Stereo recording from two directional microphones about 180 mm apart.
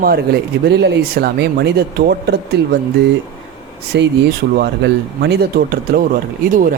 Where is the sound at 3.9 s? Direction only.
75° right (ahead or behind).